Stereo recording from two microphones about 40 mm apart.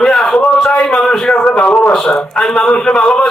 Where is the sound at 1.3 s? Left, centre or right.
Left.